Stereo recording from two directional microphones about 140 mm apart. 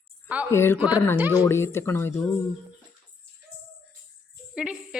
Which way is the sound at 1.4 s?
20° left (ahead or behind).